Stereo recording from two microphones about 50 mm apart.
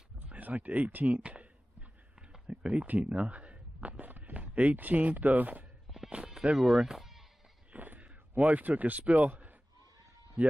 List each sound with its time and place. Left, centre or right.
0.3 s speech: right
1.0 s a sound: right
2.1 s speech: centre; by 5.7 s right
5.9 s music: centre
7.7 s a sound: right
10.4 s speech: right